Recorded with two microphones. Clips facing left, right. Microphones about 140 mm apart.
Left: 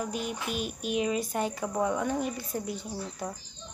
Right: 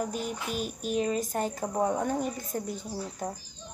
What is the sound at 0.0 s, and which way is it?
Speech, 40° right (ahead or behind).